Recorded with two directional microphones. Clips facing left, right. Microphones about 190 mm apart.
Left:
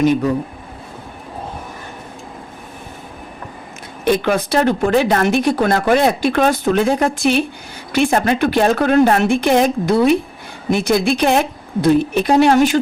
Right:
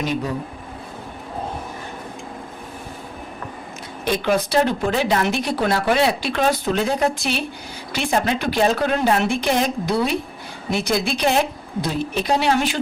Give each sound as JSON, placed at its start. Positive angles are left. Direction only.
{"t": 4.0, "sound": "speech", "side_deg": 55}